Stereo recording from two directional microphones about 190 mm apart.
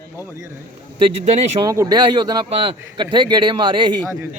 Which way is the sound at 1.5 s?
15° right (ahead or behind).